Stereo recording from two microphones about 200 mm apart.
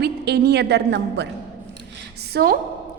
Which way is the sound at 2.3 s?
50° right (ahead or behind).